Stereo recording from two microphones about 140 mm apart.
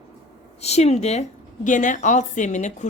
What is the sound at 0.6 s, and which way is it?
A woman's voice, 50° left (ahead or behind).